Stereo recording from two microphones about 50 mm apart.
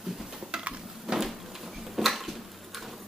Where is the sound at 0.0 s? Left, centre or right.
Centre.